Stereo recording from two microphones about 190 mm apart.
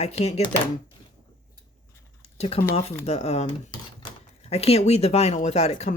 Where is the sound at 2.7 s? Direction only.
35° left (ahead or behind).